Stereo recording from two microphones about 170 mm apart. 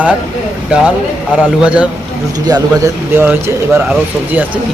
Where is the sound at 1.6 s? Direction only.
5° right (ahead or behind).